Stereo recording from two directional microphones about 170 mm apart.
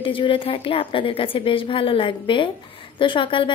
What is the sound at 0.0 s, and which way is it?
A woman's voice, 30° left (ahead or behind).